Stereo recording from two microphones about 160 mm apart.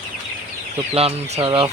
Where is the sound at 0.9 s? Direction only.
40° right (ahead or behind).